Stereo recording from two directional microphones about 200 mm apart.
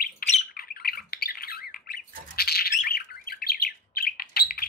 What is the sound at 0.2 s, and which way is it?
Bird, 50° left (ahead or behind).